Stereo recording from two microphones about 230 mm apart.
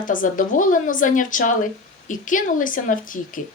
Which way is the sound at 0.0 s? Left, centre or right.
Left.